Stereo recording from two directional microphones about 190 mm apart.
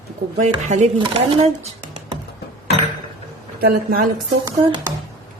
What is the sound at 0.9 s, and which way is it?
Speech, 25° right (ahead or behind).